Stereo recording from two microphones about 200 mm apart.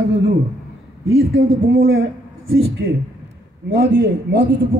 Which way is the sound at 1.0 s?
75° right (ahead or behind).